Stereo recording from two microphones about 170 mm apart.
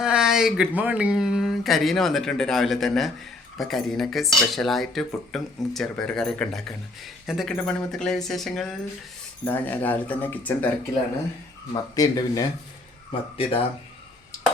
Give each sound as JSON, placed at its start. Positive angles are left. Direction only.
{"t": 0.0, "sound": "a sound", "side_deg": -5}
{"t": 0.8, "sound": "speech", "side_deg": -10}
{"t": 11.7, "sound": "speech", "side_deg": 20}
{"t": 13.1, "sound": "speech", "side_deg": 35}